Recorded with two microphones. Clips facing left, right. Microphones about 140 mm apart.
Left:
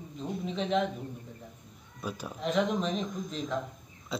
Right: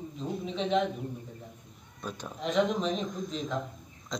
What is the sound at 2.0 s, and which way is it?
Speech, 10° left (ahead or behind).